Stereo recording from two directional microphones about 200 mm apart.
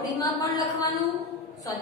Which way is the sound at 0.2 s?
15° left (ahead or behind).